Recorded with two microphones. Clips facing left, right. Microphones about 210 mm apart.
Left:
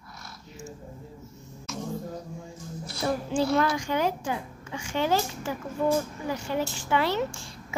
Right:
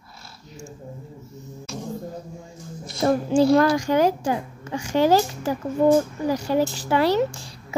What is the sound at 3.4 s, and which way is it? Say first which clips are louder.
A woman's voice: right 7 dB; 40° right (ahead or behind).